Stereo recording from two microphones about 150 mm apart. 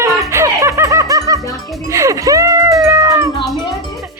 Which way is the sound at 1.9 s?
20° right (ahead or behind).